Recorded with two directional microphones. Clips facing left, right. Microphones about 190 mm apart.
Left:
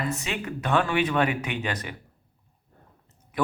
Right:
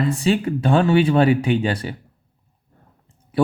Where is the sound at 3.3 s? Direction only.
30° right (ahead or behind).